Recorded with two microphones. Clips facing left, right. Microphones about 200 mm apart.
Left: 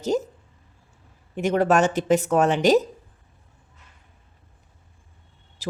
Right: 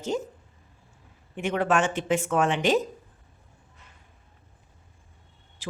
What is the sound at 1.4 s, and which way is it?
Speech, 40° left (ahead or behind).